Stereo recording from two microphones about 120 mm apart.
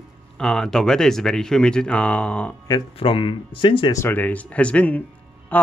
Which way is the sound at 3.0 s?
45° left (ahead or behind).